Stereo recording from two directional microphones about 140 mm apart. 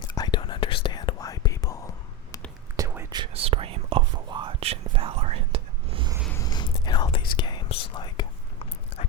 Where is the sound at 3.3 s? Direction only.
45° right (ahead or behind).